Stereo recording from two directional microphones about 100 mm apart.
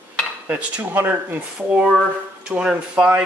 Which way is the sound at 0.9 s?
20° right (ahead or behind).